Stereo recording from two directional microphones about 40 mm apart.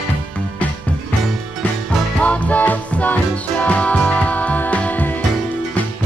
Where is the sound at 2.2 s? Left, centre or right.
Left.